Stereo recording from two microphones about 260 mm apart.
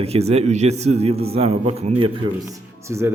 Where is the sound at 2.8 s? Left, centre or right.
Centre.